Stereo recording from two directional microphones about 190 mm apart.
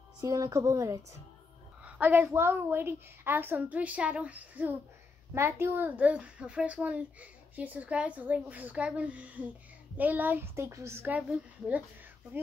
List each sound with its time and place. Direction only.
0.2 s a child's voice: 15° right (ahead or behind)